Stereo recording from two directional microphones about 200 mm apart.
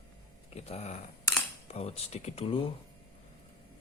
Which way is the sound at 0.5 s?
35° left (ahead or behind).